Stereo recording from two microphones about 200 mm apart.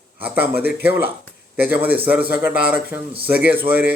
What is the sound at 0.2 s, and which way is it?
Speech, 10° right (ahead or behind).